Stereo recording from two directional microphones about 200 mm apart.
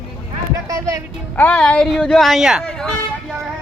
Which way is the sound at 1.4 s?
5° left (ahead or behind).